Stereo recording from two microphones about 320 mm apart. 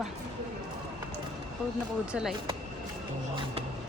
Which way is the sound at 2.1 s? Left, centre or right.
Centre.